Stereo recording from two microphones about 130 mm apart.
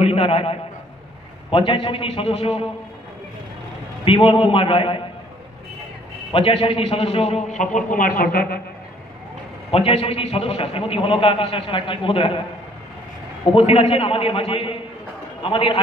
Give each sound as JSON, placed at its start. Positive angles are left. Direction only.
{"t": 0.0, "sound": "a man's voice", "side_deg": 50}
{"t": 4.0, "sound": "a man's voice", "side_deg": 45}
{"t": 6.3, "sound": "a man's voice", "side_deg": 45}
{"t": 7.7, "sound": "speech", "side_deg": 90}
{"t": 9.7, "sound": "a man's voice", "side_deg": 50}
{"t": 13.5, "sound": "a man's voice", "side_deg": 45}